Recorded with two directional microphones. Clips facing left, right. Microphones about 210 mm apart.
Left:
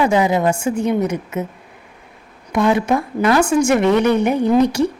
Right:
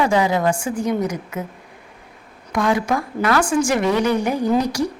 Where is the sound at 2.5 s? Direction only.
25° left (ahead or behind).